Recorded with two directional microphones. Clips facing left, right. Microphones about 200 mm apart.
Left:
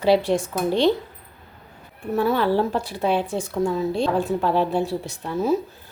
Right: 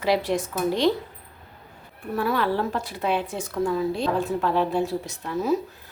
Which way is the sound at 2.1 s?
25° left (ahead or behind).